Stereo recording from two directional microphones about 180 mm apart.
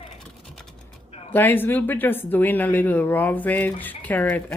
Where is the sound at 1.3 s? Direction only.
10° left (ahead or behind).